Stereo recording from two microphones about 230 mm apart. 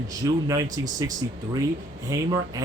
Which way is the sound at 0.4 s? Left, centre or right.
Centre.